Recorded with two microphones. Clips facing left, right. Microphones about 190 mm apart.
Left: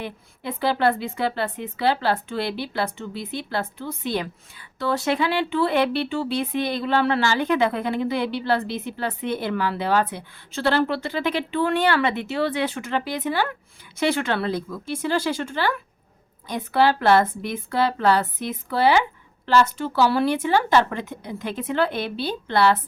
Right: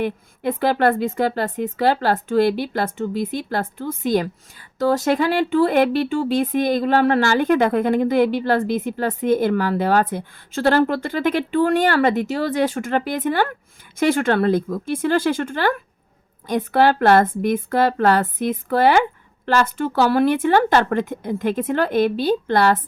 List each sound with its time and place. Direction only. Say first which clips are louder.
0.0 s a woman's voice: right 9 dB; 50° right (ahead or behind)